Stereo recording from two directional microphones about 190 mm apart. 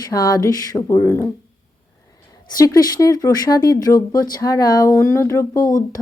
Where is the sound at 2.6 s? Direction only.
20° left (ahead or behind).